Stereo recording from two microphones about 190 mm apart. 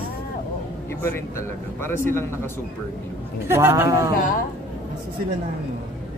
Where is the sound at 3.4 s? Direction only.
15° right (ahead or behind).